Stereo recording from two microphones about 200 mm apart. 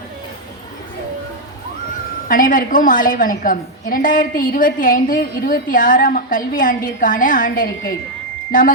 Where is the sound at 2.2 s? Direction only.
40° left (ahead or behind).